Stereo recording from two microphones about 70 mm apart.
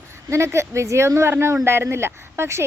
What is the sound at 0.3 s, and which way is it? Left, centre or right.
Speech, right.